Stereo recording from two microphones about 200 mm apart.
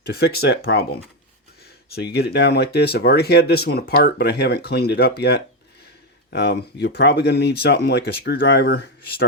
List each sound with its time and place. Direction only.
0.0 s speech: 50° left (ahead or behind)